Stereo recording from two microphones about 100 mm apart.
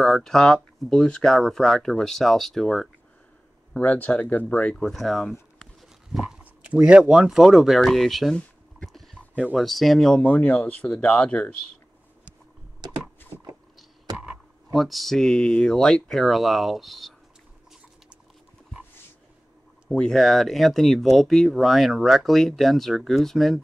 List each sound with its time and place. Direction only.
0.0 s speech: centre (ahead or behind)
3.7 s speech: 15° left (ahead or behind)
8.4 s a sound: 5° left (ahead or behind)
9.6 s speech: centre (ahead or behind)
10.2 s speech: 15° left (ahead or behind)
12.8 s a sound: 45° right (ahead or behind)
14.1 s a sound: 15° right (ahead or behind)
14.7 s speech: centre (ahead or behind)
19.9 s speech: 5° left (ahead or behind)